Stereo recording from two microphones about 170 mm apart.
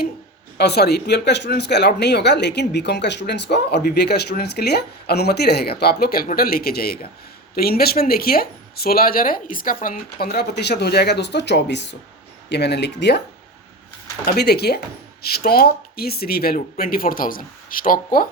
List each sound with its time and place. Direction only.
0.5 s speech: 75° left (ahead or behind)
14.3 s speech: 70° left (ahead or behind); by 18.3 s 55° left (ahead or behind)